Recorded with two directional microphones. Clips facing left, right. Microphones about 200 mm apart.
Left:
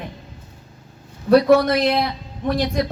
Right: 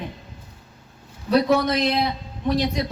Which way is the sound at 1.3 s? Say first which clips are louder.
Left 5 dB; 55° left (ahead or behind).